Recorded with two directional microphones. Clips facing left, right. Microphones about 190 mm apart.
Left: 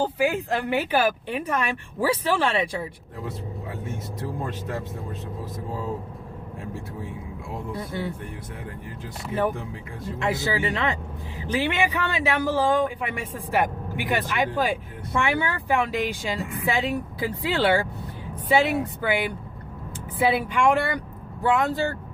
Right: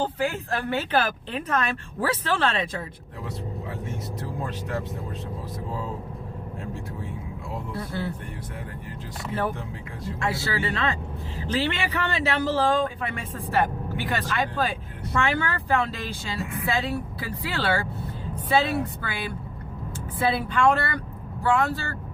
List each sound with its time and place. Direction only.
0.0 s a man's voice: 10° left (ahead or behind)
7.5 s a man's voice: 15° left (ahead or behind)
10.2 s a man's voice: 20° left (ahead or behind)